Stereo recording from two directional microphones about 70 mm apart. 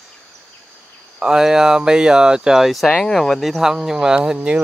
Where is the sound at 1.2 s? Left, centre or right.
Centre.